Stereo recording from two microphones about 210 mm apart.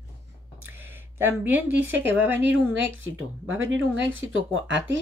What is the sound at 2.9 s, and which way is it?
Speech, 70° right (ahead or behind).